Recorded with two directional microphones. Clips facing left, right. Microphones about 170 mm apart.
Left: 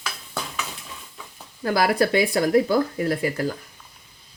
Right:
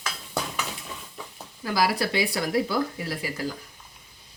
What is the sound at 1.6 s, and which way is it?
Speech, 55° left (ahead or behind).